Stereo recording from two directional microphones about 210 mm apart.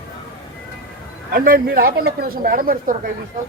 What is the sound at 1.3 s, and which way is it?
A man's voice, 45° right (ahead or behind).